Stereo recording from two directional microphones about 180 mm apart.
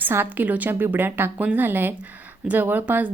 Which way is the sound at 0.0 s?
10° right (ahead or behind).